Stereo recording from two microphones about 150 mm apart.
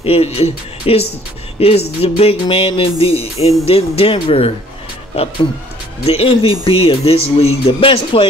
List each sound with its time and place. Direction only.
0.0 s speech: 40° left (ahead or behind)